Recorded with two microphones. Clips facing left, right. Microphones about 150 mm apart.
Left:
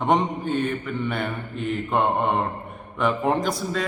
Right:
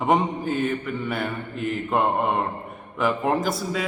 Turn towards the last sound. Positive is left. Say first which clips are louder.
# even
turn(degrees=0)  # may be behind; listen again after turning